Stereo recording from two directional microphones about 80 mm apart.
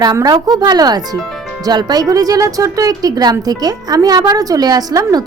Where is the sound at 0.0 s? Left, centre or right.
Right.